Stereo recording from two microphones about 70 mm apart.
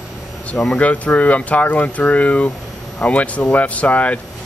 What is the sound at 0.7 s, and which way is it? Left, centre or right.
Speech, centre.